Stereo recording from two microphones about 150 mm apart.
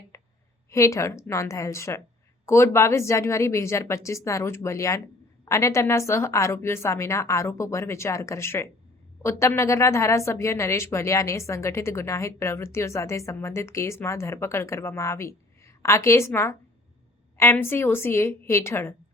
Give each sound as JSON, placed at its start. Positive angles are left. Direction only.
{"t": 0.7, "sound": "a woman's voice", "side_deg": 20}